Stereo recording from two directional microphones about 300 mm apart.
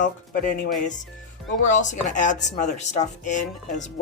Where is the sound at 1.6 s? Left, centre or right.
Left.